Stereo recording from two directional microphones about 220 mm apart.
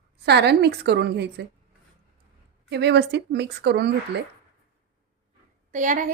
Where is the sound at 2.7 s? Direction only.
50° right (ahead or behind).